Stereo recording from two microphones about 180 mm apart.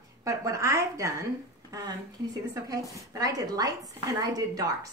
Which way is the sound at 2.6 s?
20° right (ahead or behind).